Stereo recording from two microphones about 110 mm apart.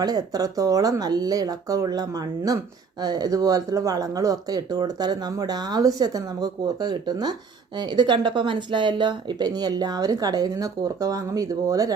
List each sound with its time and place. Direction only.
0.0 s speech: 35° right (ahead or behind)